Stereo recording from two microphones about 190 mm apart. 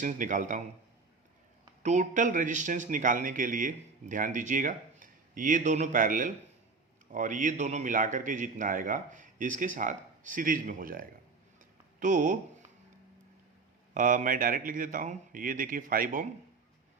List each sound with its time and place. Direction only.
0.0 s a man's voice: 40° right (ahead or behind)
1.8 s speech: 40° right (ahead or behind)
13.9 s speech: 40° right (ahead or behind)